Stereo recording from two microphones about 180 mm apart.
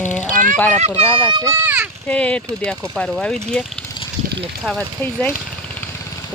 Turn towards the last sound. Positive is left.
turn(degrees=5)  # may be behind; listen again after turning